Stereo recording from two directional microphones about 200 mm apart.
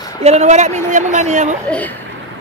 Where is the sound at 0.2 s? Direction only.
35° right (ahead or behind).